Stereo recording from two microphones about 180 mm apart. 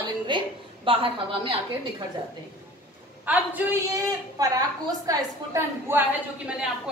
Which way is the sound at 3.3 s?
10° right (ahead or behind).